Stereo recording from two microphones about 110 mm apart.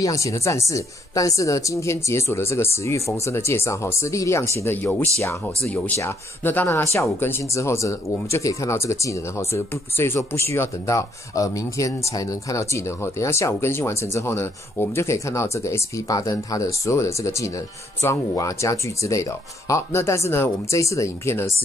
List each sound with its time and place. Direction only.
0.0 s speech: 30° left (ahead or behind)